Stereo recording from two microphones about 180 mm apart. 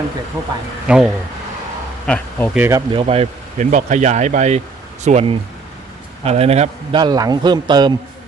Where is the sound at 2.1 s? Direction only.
10° left (ahead or behind).